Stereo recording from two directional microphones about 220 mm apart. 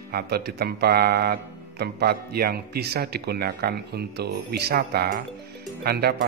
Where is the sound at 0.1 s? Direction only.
45° right (ahead or behind).